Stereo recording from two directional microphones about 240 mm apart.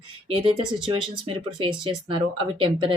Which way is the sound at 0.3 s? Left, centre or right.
Right.